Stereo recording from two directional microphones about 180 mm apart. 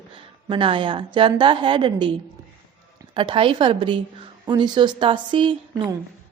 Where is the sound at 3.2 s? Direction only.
30° right (ahead or behind).